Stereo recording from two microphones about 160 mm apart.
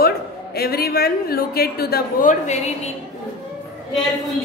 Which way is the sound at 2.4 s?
45° left (ahead or behind).